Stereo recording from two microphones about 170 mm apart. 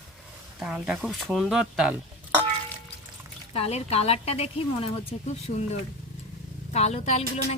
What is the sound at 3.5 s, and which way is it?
A woman's voice, 40° left (ahead or behind).